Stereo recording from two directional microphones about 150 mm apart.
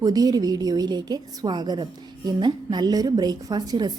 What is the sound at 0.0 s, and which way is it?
A woman's voice, 25° right (ahead or behind).